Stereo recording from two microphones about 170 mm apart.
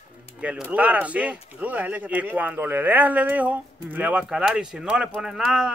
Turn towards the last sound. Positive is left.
turn(degrees=-5)  # may be behind; listen again after turning